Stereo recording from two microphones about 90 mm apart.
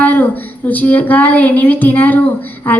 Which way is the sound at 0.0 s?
20° left (ahead or behind).